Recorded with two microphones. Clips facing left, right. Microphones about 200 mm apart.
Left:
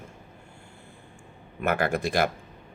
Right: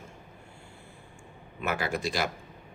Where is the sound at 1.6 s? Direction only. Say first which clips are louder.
Left 5 dB; 55° left (ahead or behind).